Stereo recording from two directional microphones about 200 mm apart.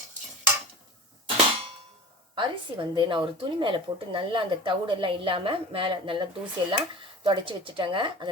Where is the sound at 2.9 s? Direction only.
25° right (ahead or behind).